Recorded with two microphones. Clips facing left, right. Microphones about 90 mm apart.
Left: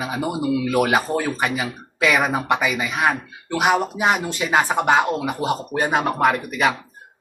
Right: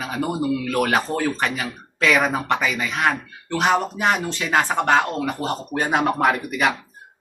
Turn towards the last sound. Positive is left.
turn(degrees=0)  # may be behind; listen again after turning